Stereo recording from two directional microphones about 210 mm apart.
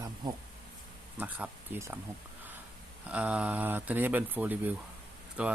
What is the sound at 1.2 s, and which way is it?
Speech, 10° right (ahead or behind).